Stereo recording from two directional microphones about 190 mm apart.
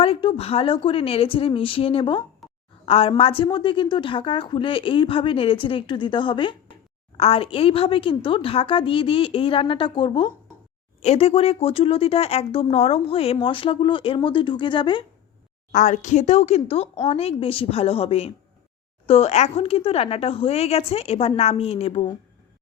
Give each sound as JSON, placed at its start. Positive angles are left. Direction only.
{"t": 0.0, "sound": "speech", "side_deg": 30}
{"t": 2.4, "sound": "a sound", "side_deg": 0}
{"t": 2.8, "sound": "speech", "side_deg": 30}
{"t": 15.7, "sound": "speech", "side_deg": 40}